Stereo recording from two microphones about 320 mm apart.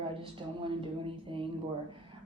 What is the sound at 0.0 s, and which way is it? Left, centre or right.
A woman's voice, centre.